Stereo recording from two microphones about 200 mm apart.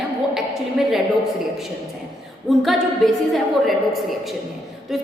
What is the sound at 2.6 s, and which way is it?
A woman's voice, centre (ahead or behind).